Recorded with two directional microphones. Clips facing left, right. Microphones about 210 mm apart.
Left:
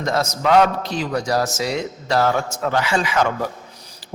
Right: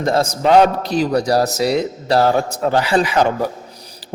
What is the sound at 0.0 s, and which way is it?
A man's voice, 30° right (ahead or behind).